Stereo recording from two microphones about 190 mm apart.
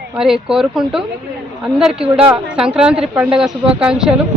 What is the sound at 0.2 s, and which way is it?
A woman's voice, 5° right (ahead or behind).